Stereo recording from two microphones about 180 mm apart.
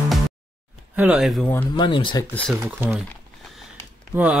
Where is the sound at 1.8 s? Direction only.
25° left (ahead or behind).